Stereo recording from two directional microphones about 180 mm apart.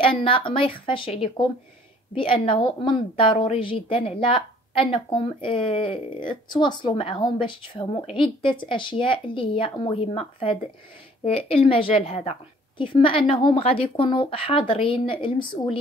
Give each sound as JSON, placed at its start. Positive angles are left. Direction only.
{"t": 0.0, "sound": "a woman's voice", "side_deg": 30}